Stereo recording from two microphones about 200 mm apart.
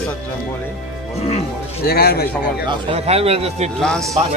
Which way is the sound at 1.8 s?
50° left (ahead or behind).